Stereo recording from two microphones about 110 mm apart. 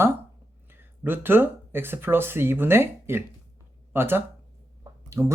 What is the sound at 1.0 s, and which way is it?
Speech, 20° right (ahead or behind).